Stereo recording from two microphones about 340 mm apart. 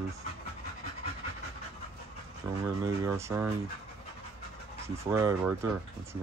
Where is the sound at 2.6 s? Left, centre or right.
Centre.